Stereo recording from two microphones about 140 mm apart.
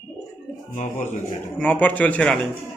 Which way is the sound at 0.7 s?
65° left (ahead or behind).